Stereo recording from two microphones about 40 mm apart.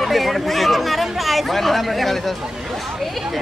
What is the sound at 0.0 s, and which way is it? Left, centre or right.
Chatter, centre.